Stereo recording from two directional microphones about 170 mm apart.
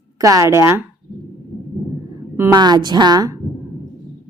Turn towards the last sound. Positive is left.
turn(degrees=-20)  # may be behind; listen again after turning